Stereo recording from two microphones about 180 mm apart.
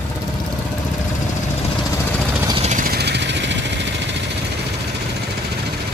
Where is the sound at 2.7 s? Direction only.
50° right (ahead or behind); by 4.2 s 80° right.